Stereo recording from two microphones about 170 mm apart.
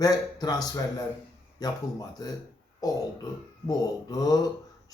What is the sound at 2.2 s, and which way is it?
Speech, 25° left (ahead or behind).